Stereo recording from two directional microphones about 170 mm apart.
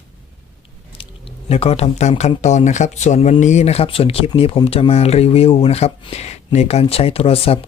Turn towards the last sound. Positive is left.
turn(degrees=35)  # may be behind; listen again after turning